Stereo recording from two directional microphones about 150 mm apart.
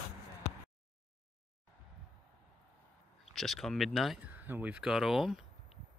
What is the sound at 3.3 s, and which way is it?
Speech, centre (ahead or behind).